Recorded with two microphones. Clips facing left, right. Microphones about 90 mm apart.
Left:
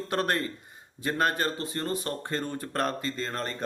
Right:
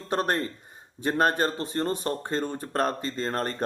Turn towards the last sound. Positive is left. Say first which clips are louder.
# right 4 dB
turn(degrees=-40)  # may be behind; listen again after turning